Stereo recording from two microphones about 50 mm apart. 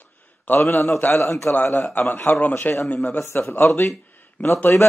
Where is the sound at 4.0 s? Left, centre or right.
Left.